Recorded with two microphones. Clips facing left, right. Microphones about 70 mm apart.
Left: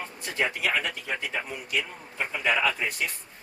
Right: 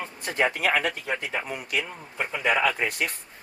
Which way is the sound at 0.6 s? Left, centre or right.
Right.